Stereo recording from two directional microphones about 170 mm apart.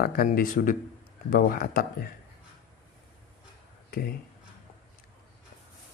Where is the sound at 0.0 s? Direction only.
60° left (ahead or behind).